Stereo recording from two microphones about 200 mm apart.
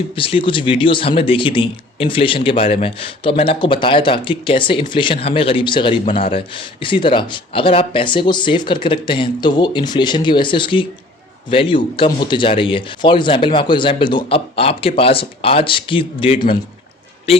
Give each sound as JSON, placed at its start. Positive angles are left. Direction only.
{"t": 0.2, "sound": "a man's voice", "side_deg": 25}